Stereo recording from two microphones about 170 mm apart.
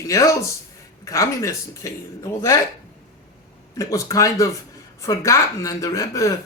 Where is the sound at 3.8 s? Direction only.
20° left (ahead or behind).